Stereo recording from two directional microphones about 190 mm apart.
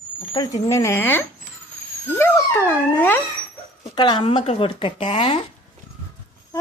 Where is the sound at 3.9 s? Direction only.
25° left (ahead or behind).